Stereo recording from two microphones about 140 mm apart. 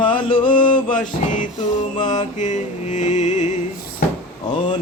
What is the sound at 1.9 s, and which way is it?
Mantra, 30° left (ahead or behind).